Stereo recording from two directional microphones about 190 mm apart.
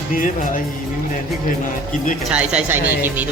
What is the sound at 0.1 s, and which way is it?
Speech, 45° left (ahead or behind).